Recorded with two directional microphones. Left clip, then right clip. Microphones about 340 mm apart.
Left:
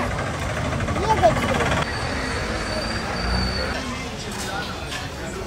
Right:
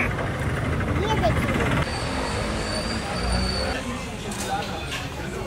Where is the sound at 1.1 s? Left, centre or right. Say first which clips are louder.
Left 7 dB; left.